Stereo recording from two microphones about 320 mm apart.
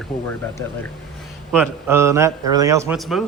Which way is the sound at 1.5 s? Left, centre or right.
Centre.